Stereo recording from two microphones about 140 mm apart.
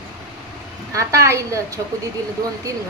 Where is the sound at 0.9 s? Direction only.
20° right (ahead or behind).